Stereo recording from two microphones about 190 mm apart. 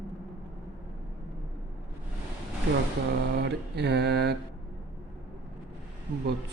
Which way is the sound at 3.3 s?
60° right (ahead or behind).